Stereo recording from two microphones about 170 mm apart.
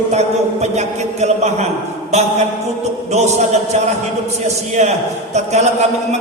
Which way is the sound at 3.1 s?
40° right (ahead or behind).